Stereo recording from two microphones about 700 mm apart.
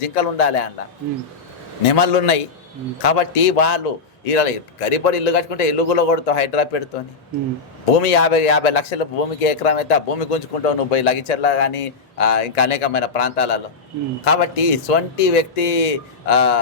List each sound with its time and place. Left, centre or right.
0.1 s speech: left
1.9 s a man's voice: left
7.9 s a man's voice: left